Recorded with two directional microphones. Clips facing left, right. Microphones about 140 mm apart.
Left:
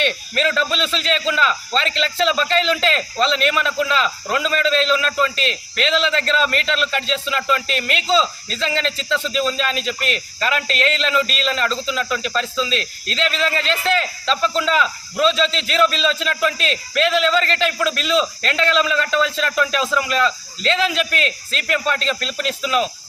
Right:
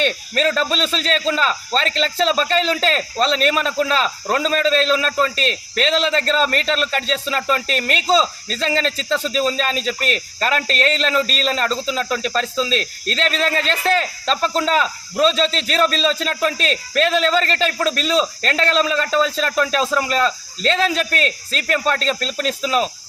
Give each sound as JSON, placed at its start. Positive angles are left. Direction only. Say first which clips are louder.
{"t": 0.0, "sound": "a man's voice", "louder": "right 2 dB", "side_deg": -40}